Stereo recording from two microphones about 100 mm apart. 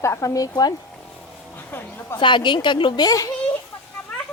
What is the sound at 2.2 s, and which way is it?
Speech, 50° left (ahead or behind).